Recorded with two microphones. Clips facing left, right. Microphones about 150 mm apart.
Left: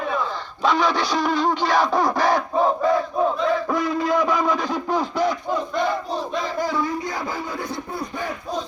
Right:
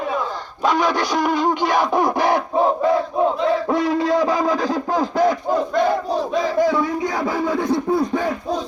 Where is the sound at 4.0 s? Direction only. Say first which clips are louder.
Right 3 dB; 35° right (ahead or behind).